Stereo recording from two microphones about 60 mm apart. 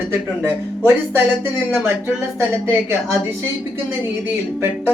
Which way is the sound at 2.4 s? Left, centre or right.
Right.